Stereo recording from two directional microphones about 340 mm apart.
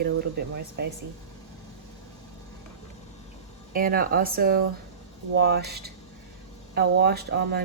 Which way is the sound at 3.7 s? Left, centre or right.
Right.